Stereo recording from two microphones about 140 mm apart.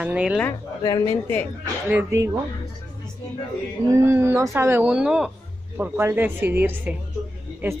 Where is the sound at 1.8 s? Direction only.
15° right (ahead or behind).